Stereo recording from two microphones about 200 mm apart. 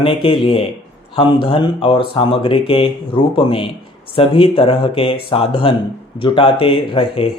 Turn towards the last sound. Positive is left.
turn(degrees=30)  # may be behind; listen again after turning